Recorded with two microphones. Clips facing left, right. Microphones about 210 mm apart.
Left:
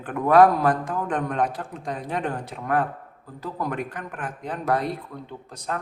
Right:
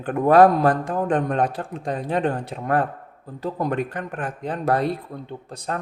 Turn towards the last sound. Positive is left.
turn(degrees=-30)  # may be behind; listen again after turning